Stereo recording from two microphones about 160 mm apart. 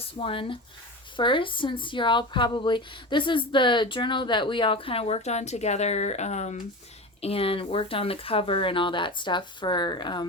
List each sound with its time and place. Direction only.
0.0 s speech: 35° left (ahead or behind)